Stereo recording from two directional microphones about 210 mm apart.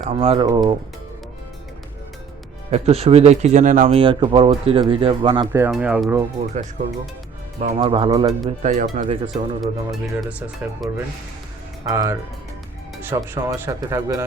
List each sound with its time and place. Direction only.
0.2 s speech: 30° right (ahead or behind)
2.6 s speech: 30° right (ahead or behind)
5.5 s speech: 10° right (ahead or behind)
7.6 s speech: 25° right (ahead or behind)
8.4 s speech: 35° right (ahead or behind)
9.0 s speech: 25° right (ahead or behind)
9.6 s speech: centre (ahead or behind)